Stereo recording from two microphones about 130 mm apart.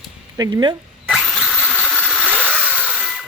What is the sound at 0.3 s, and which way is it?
Speech, 30° right (ahead or behind).